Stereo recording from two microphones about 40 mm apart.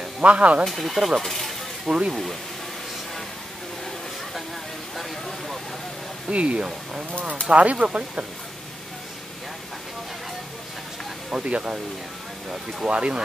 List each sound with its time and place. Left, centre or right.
0.2 s speech: right
0.7 s speech: centre
1.9 s speech: centre
6.3 s speech: right
11.2 s speech: right
12.8 s speech: right